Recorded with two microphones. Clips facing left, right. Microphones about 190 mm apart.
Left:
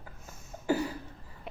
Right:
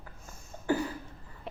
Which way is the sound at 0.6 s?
10° left (ahead or behind).